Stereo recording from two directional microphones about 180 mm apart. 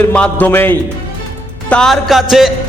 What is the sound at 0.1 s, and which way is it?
Music, 10° left (ahead or behind).